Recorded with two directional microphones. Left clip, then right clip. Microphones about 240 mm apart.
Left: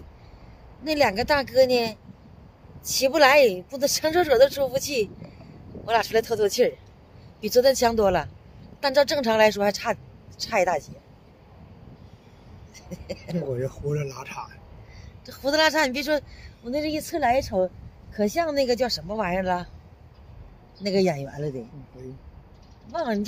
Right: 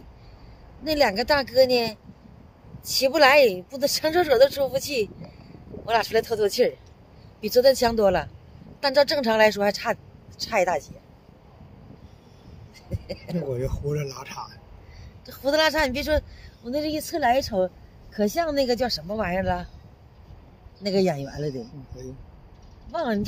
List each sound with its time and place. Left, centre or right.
0.8 s speech: centre
12.7 s a sound: centre
13.5 s speech: centre
15.2 s speech: centre
20.8 s speech: centre
22.0 s speech: centre
22.8 s speech: centre